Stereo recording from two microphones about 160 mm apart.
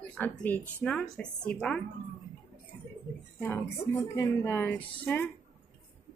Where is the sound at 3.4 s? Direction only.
15° left (ahead or behind).